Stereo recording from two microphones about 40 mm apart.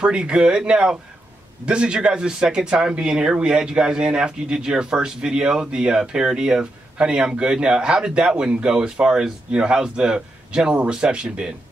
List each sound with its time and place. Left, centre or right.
0.0 s speech: right